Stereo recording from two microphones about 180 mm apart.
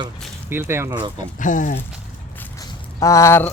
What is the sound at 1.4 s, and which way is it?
Speech, 45° left (ahead or behind).